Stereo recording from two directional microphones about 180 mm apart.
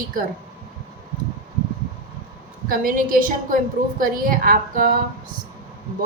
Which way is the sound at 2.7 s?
50° right (ahead or behind).